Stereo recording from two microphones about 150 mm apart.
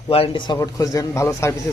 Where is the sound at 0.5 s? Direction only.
25° left (ahead or behind).